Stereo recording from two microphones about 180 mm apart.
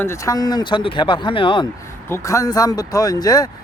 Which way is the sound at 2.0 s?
15° left (ahead or behind).